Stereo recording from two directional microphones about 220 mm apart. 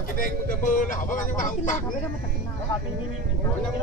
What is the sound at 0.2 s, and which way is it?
Speech, 35° left (ahead or behind).